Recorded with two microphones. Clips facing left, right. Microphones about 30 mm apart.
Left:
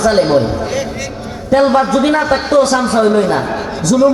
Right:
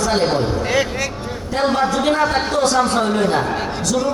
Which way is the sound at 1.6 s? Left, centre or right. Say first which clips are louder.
Left 5 dB; centre.